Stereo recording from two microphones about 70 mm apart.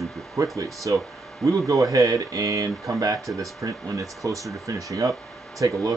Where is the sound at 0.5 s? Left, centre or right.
Right.